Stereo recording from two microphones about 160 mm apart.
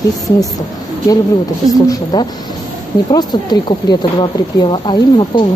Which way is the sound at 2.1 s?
25° left (ahead or behind).